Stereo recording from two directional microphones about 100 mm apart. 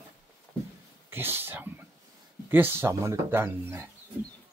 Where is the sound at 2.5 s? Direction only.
20° right (ahead or behind).